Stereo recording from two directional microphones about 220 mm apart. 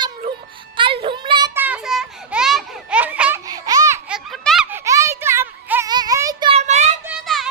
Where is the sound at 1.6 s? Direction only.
5° right (ahead or behind).